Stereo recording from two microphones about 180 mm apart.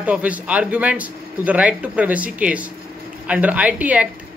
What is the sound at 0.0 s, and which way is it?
A man's voice, 10° right (ahead or behind).